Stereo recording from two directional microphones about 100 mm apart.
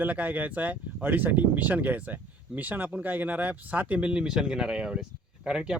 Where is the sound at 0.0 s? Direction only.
15° right (ahead or behind).